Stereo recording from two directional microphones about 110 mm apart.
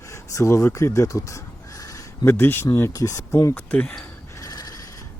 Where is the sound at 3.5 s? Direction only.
15° left (ahead or behind).